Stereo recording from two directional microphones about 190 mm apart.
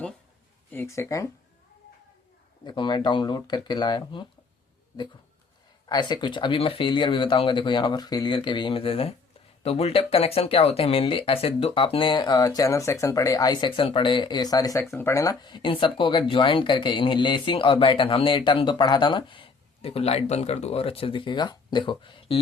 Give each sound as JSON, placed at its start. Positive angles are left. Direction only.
{"t": 0.7, "sound": "speech", "side_deg": 15}
{"t": 2.6, "sound": "speech", "side_deg": 25}
{"t": 5.9, "sound": "speech", "side_deg": 20}